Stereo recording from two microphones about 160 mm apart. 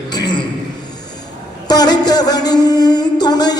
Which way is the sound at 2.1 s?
25° left (ahead or behind).